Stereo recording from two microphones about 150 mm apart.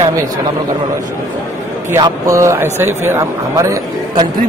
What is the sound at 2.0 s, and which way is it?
A man's voice, 20° right (ahead or behind).